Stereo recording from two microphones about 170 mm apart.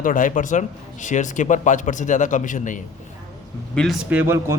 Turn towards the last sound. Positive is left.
turn(degrees=-15)  # may be behind; listen again after turning